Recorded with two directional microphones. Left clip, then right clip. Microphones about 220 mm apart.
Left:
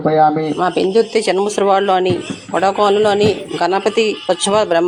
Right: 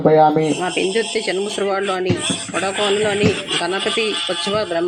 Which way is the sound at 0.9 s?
5° right (ahead or behind).